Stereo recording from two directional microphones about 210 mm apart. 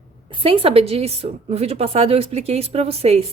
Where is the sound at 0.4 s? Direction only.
25° right (ahead or behind).